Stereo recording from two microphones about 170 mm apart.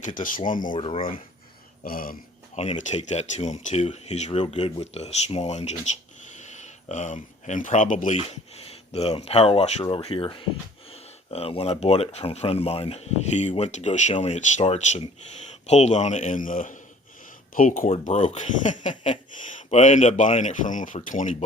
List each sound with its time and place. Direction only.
0.0 s speech: 50° left (ahead or behind)
0.7 s speech: 30° left (ahead or behind)
1.8 s a sound: 60° left (ahead or behind)
2.6 s speech: 40° left (ahead or behind)
18.9 s speech: 30° left (ahead or behind)
19.7 s speech: 45° left (ahead or behind)